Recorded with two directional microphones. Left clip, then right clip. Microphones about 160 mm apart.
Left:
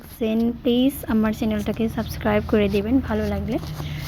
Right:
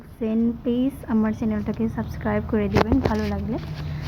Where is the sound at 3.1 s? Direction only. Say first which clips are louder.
Left 2 dB; 5° left (ahead or behind).